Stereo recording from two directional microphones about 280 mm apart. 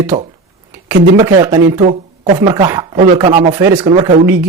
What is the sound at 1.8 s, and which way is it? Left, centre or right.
Speech, right.